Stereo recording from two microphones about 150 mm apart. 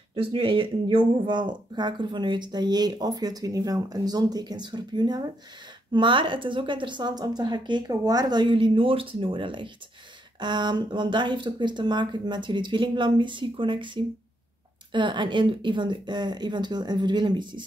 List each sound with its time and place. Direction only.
0.1 s a woman's voice: 35° right (ahead or behind)